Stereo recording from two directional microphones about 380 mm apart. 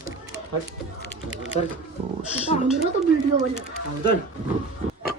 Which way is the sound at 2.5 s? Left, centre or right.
Centre.